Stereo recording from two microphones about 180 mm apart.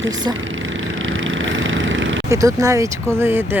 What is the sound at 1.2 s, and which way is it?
Vehicle, 90° right.